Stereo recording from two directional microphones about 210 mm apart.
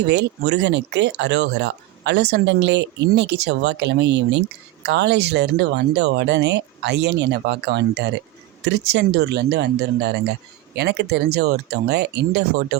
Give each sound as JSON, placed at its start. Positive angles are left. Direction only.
{"t": 0.0, "sound": "speech", "side_deg": -55}